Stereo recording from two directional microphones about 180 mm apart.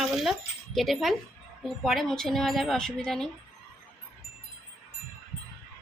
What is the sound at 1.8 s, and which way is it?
A woman's voice, centre (ahead or behind).